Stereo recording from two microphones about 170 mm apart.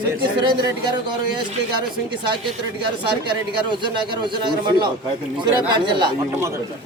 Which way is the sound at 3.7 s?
25° right (ahead or behind).